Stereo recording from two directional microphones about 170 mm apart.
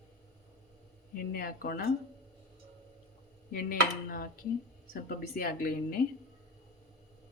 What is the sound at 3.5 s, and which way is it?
A woman's voice, 60° left (ahead or behind).